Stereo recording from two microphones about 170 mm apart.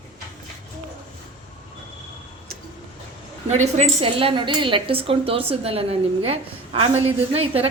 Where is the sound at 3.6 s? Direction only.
40° right (ahead or behind).